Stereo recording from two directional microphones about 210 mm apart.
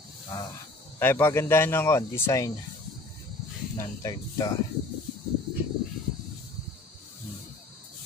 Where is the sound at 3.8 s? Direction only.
15° left (ahead or behind).